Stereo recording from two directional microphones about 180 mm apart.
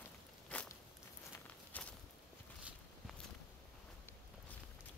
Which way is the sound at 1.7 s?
10° left (ahead or behind).